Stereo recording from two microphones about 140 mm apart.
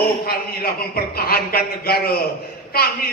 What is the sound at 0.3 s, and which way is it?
A man's voice, 90° left.